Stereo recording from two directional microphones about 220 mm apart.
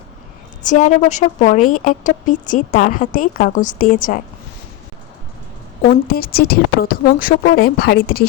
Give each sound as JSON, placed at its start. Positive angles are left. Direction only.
{"t": 0.6, "sound": "speech", "side_deg": 35}
{"t": 5.9, "sound": "a woman's voice", "side_deg": 45}